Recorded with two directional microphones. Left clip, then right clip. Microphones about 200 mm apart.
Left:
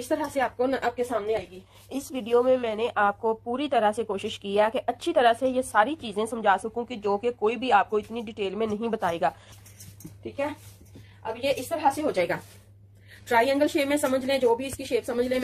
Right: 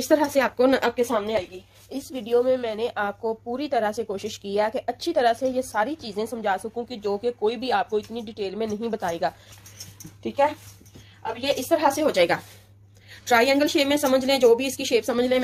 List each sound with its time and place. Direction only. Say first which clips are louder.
0.1 s a woman's voice: right 6 dB; 50° right (ahead or behind)
1.9 s speech: right 1 dB; centre (ahead or behind)
11.4 s a woman's voice: right 3 dB; 45° right (ahead or behind)
13.2 s a woman's voice: right 3 dB; 30° right (ahead or behind)